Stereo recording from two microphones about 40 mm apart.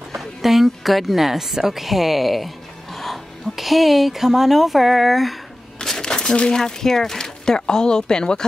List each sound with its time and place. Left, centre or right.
0.1 s a woman's voice: centre
5.9 s a sound: centre
6.6 s speech: centre